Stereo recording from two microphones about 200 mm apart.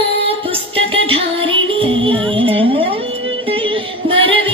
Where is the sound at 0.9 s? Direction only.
25° right (ahead or behind).